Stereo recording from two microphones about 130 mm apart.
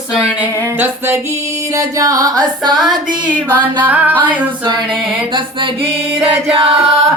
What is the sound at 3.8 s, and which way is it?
Female singing, 15° right (ahead or behind).